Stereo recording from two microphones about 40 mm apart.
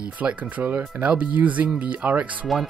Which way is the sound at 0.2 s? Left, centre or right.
Right.